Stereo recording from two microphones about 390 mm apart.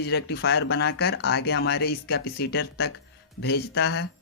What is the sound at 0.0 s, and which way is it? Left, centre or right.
Speech, left.